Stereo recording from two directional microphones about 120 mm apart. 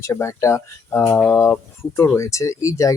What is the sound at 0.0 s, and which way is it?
Speech, 25° left (ahead or behind).